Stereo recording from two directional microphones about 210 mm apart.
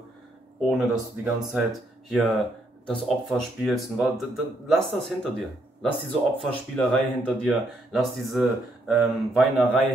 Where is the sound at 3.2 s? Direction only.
Centre (ahead or behind).